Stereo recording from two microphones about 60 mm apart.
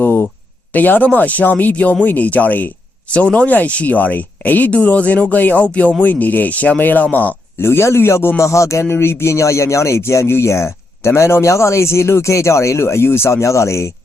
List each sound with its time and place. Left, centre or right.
0.0 s a sound: left
0.7 s speech: left
7.6 s speech: left
8.4 s speech: left